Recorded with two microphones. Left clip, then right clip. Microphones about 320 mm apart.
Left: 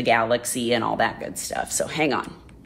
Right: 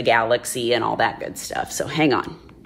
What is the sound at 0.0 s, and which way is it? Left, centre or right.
Speech, right.